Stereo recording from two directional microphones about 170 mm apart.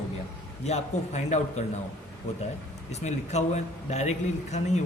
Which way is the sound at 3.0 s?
40° left (ahead or behind).